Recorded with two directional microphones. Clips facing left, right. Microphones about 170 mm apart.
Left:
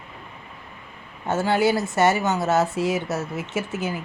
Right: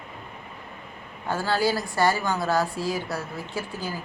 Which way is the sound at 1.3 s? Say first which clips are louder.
Left 4 dB; 20° left (ahead or behind).